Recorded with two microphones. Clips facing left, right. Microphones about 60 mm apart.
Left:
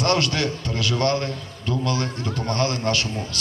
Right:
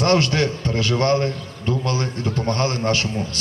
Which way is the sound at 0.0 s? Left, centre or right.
Right.